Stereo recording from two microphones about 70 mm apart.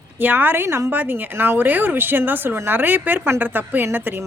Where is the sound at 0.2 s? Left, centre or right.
Right.